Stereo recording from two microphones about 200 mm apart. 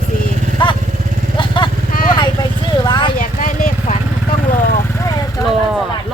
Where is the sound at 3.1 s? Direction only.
40° left (ahead or behind).